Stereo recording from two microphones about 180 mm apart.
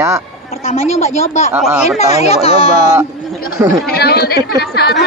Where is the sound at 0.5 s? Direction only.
35° left (ahead or behind).